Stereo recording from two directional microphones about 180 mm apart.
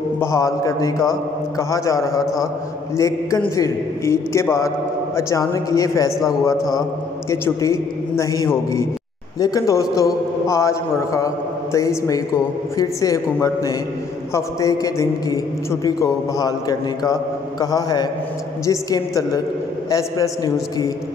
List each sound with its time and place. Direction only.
0.2 s a man's voice: 15° left (ahead or behind)
7.2 s a man's voice: 15° left (ahead or behind)